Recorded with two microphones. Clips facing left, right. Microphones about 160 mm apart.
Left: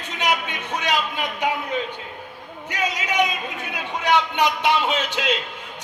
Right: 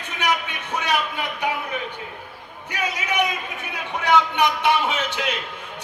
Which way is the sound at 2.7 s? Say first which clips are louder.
Left 1 dB; 20° left (ahead or behind).